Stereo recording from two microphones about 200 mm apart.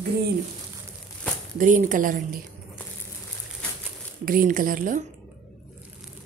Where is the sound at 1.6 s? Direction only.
40° right (ahead or behind).